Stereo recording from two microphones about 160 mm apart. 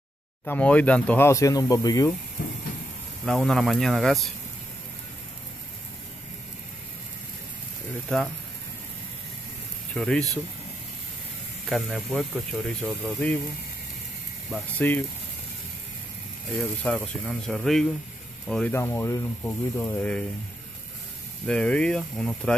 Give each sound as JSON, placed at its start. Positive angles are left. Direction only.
{"t": 0.5, "sound": "speech", "side_deg": 10}
{"t": 2.4, "sound": "train", "side_deg": 60}
{"t": 3.3, "sound": "speech", "side_deg": 0}
{"t": 9.9, "sound": "speech", "side_deg": 5}
{"t": 11.7, "sound": "speech", "side_deg": 0}
{"t": 14.8, "sound": "speech", "side_deg": 10}
{"t": 16.8, "sound": "speech", "side_deg": 5}
{"t": 21.5, "sound": "speech", "side_deg": 5}